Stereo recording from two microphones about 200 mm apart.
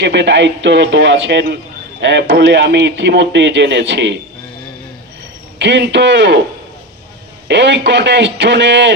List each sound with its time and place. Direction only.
0.0 s speech: 60° right (ahead or behind)
5.5 s speech: 60° right (ahead or behind)
7.4 s speech: 60° right (ahead or behind)